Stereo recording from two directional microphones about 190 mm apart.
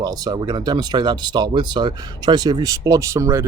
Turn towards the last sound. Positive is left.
turn(degrees=-15)  # may be behind; listen again after turning